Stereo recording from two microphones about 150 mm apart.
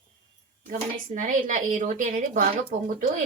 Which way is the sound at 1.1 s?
55° right (ahead or behind).